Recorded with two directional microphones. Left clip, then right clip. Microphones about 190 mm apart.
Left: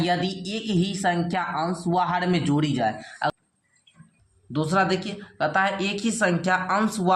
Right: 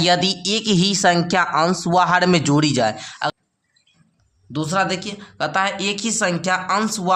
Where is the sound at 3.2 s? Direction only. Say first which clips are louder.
Right 2 dB; 20° right (ahead or behind).